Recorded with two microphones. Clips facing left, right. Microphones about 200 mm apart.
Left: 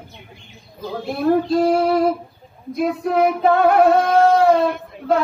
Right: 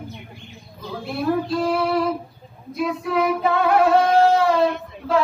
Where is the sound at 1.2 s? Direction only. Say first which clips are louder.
Left 6 dB; 45° left (ahead or behind).